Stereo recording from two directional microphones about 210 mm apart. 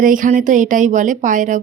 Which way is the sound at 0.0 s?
40° right (ahead or behind).